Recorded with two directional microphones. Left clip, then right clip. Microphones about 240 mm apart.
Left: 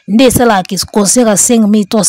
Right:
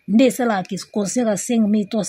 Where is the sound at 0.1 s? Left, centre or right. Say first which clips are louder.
Left 10 dB; left.